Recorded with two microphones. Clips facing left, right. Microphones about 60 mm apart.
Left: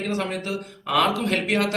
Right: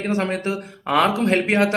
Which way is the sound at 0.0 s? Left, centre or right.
Right.